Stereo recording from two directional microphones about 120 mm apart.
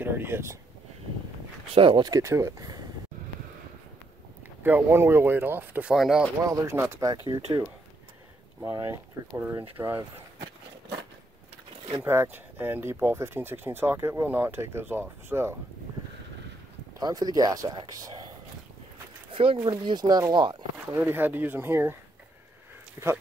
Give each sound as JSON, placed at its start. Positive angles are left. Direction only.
{"t": 0.0, "sound": "speech", "side_deg": -20}
{"t": 1.8, "sound": "speech", "side_deg": -45}
{"t": 2.0, "sound": "speech", "side_deg": -25}
{"t": 4.6, "sound": "speech", "side_deg": -20}
{"t": 5.9, "sound": "speech", "side_deg": -5}
{"t": 6.4, "sound": "speech", "side_deg": -25}
{"t": 8.5, "sound": "speech", "side_deg": -20}
{"t": 12.0, "sound": "speech", "side_deg": -20}
{"t": 17.0, "sound": "speech", "side_deg": -30}
{"t": 19.3, "sound": "speech", "side_deg": -50}
{"t": 20.9, "sound": "speech", "side_deg": -15}
{"t": 23.0, "sound": "speech", "side_deg": -20}